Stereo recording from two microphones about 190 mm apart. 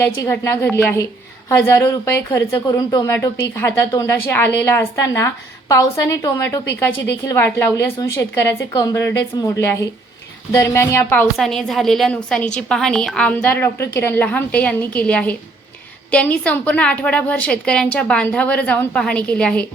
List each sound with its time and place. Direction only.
0.0 s a woman's voice: 15° left (ahead or behind)
11.3 s a woman's voice: centre (ahead or behind)